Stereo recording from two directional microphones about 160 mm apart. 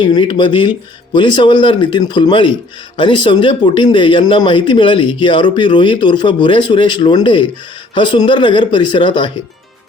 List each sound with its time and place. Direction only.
0.0 s speech: 30° left (ahead or behind)